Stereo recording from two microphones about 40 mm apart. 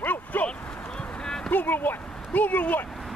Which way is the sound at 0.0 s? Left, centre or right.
Left.